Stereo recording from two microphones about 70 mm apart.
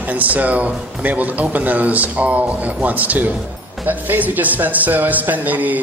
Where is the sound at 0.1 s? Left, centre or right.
Right.